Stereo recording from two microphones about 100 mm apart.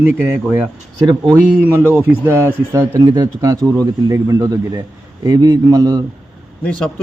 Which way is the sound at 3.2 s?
40° right (ahead or behind).